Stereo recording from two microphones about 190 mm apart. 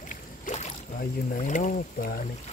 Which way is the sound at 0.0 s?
40° left (ahead or behind).